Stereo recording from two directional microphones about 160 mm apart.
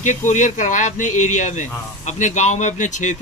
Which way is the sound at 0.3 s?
50° left (ahead or behind).